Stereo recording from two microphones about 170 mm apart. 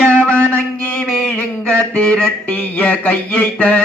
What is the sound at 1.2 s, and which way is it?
Mantra, 10° left (ahead or behind).